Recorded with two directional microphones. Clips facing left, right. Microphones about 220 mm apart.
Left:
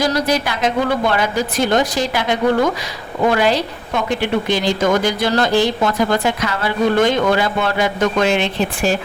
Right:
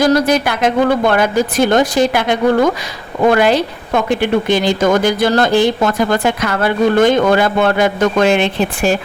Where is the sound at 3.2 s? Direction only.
55° right (ahead or behind).